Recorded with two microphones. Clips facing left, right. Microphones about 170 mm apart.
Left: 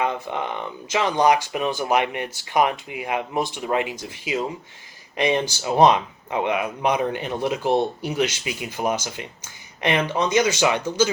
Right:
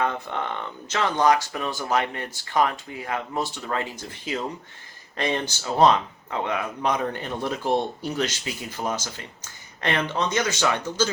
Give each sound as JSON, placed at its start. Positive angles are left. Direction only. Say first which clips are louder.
{"t": 0.0, "sound": "speech", "louder": "left 2 dB", "side_deg": 15}